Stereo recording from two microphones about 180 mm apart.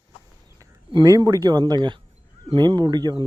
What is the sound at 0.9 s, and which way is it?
Speech, 25° right (ahead or behind).